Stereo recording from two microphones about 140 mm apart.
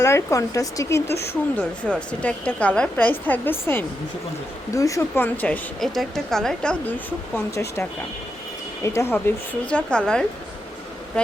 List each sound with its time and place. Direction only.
0.0 s a woman's voice: 20° left (ahead or behind); by 6.7 s 5° left (ahead or behind)
7.3 s a woman's voice: 20° left (ahead or behind)